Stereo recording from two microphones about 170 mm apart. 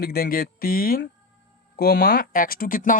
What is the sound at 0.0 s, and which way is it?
Speech, 65° left (ahead or behind).